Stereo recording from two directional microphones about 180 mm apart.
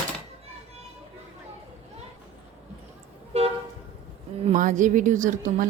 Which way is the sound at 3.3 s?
35° right (ahead or behind).